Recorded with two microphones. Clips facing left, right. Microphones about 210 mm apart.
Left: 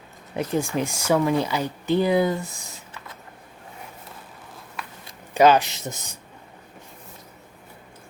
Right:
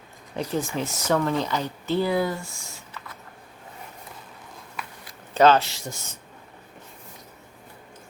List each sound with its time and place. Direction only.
0.5 s speech: 15° left (ahead or behind)
5.3 s speech: 10° left (ahead or behind)